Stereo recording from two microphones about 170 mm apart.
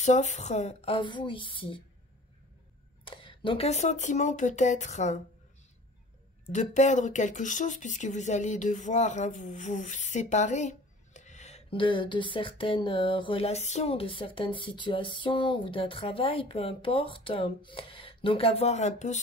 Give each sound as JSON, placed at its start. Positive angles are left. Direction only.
{"t": 0.0, "sound": "speech", "side_deg": 45}
{"t": 3.1, "sound": "speech", "side_deg": 30}
{"t": 6.5, "sound": "speech", "side_deg": 45}